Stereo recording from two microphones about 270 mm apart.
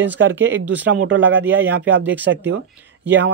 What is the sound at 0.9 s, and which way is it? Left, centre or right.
Speech, right.